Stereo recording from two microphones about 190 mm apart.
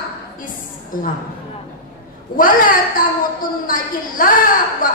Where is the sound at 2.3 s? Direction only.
45° left (ahead or behind).